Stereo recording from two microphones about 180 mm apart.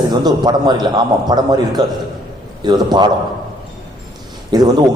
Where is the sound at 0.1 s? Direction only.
25° right (ahead or behind).